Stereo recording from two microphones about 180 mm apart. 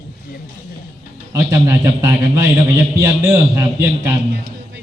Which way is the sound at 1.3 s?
15° right (ahead or behind).